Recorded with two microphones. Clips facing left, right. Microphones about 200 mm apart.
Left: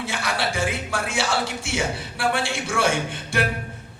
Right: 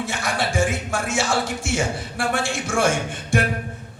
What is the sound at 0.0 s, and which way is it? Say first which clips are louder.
Speech: right 1 dB; 50° right (ahead or behind).